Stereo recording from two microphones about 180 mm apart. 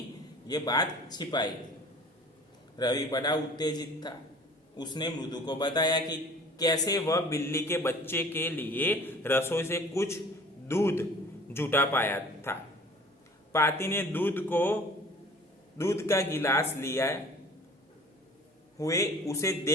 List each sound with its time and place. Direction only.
0.4 s a man's voice: 20° left (ahead or behind)
2.7 s a man's voice: 20° left (ahead or behind)
15.8 s a man's voice: 15° left (ahead or behind)
18.8 s a man's voice: 15° left (ahead or behind)